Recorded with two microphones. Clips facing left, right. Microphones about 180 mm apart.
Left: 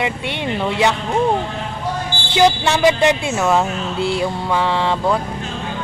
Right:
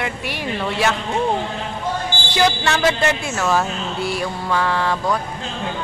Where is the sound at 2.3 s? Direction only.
20° left (ahead or behind).